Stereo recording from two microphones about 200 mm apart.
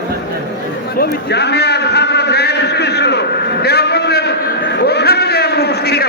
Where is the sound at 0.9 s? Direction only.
55° left (ahead or behind).